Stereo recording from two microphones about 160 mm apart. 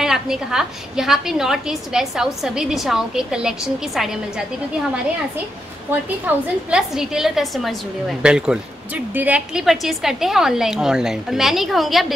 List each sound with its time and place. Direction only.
0.0 s a woman's voice: 5° right (ahead or behind)
5.9 s a woman's voice: 10° right (ahead or behind)